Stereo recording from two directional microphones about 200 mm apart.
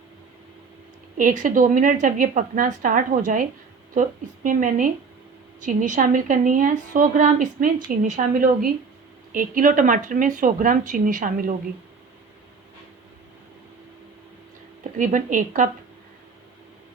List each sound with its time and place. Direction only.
1.1 s a woman's voice: 40° right (ahead or behind)
4.4 s a woman's voice: 40° right (ahead or behind)
14.9 s a woman's voice: 40° right (ahead or behind)